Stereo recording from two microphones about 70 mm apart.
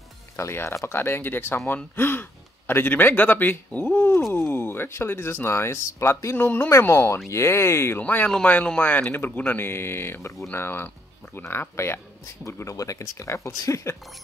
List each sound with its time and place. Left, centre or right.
0.4 s speech: left
6.9 s speech: left
8.0 s speech: left